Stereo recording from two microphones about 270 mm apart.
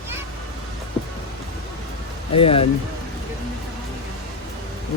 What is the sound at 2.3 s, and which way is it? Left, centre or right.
Speech, left.